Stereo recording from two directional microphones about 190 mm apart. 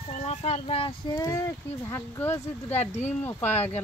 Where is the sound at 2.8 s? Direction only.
35° left (ahead or behind).